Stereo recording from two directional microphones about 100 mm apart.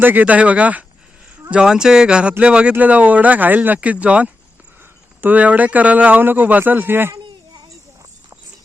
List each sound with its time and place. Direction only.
0.0 s speech: 20° right (ahead or behind)